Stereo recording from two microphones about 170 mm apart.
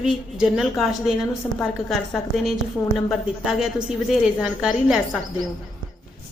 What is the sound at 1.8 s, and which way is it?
Speech, centre (ahead or behind).